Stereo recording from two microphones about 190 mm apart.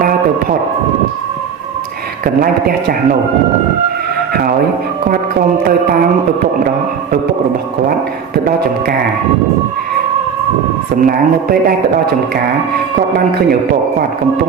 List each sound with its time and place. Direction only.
2.2 s a man's voice: 50° right (ahead or behind)
11.0 s a man's voice: 50° right (ahead or behind)